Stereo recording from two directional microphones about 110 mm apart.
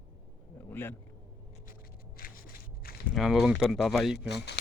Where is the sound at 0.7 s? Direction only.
20° left (ahead or behind).